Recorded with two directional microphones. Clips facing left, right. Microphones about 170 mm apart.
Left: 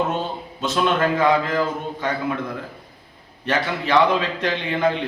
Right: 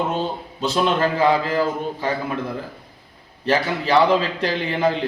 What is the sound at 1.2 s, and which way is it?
Speech, 30° right (ahead or behind).